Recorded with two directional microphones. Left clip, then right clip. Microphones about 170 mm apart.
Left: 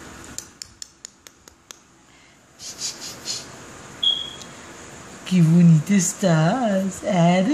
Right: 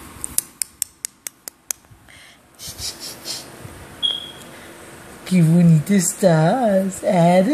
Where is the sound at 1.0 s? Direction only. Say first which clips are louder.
Right 9 dB; 40° right (ahead or behind).